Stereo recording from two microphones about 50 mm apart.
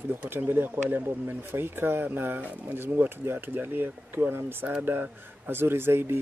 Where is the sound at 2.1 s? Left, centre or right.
Right.